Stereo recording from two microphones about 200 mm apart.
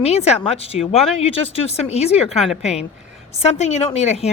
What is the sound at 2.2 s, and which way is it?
Speech, centre (ahead or behind).